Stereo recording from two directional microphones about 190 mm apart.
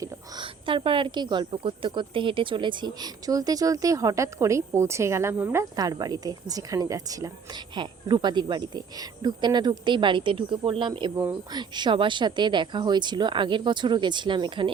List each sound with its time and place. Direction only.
0.0 s a woman's voice: 25° right (ahead or behind)